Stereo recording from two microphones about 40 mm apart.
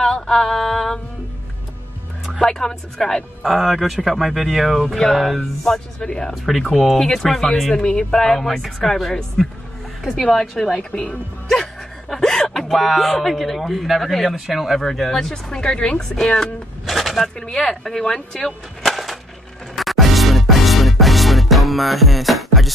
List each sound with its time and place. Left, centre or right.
0.0 s mantra: centre
2.4 s speech: centre
5.9 s speech: centre
6.7 s speech: centre
7.0 s speech: centre
10.5 s speech: centre
10.8 s a woman's voice: left
11.4 s speech: centre
14.8 s speech: centre
16.8 s a sound: centre
17.4 s speech: centre
18.8 s a sound: centre
19.7 s music: centre